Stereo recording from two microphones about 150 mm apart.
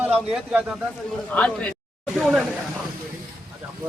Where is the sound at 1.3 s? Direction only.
10° left (ahead or behind).